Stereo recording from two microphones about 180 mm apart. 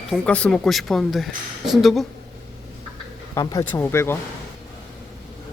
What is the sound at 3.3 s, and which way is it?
Speech, 20° left (ahead or behind).